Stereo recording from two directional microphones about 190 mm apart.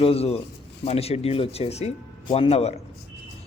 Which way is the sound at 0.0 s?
30° left (ahead or behind).